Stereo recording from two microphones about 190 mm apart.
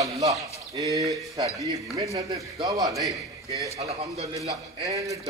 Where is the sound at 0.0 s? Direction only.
15° right (ahead or behind).